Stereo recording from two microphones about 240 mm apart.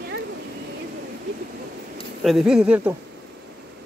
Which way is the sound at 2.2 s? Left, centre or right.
Centre.